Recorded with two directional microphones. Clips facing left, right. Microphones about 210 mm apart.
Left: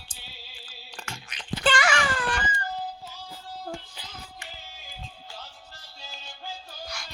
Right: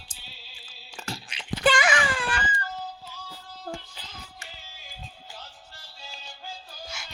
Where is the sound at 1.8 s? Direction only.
20° right (ahead or behind).